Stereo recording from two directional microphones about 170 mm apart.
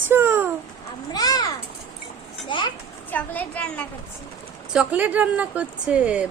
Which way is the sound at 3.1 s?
10° left (ahead or behind).